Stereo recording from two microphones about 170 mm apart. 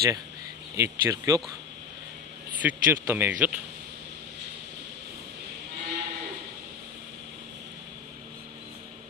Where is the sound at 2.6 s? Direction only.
10° right (ahead or behind).